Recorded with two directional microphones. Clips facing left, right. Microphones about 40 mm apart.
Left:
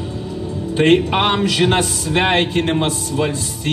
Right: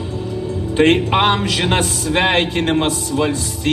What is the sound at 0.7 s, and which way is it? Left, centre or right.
A man's voice, right.